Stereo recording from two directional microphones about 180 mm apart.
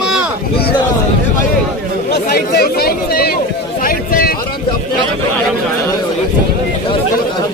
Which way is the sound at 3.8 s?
55° left (ahead or behind).